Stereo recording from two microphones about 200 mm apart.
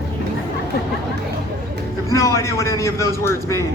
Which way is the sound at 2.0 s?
15° left (ahead or behind).